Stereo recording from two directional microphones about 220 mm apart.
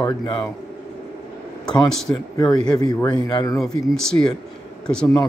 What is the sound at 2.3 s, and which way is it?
A man's voice, 15° left (ahead or behind).